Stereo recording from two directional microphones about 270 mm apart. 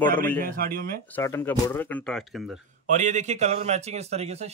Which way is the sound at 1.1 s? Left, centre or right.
Centre.